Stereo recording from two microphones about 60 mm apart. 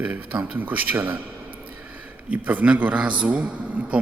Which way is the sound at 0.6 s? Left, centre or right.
Right.